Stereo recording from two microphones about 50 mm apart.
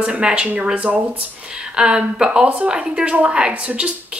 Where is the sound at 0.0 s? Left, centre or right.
Right.